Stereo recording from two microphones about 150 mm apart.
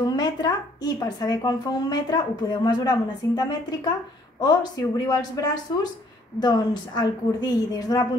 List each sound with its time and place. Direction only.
0.0 s a woman's voice: 25° left (ahead or behind)